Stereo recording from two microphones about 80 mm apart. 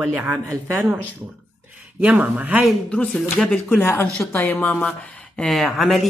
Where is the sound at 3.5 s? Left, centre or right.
Left.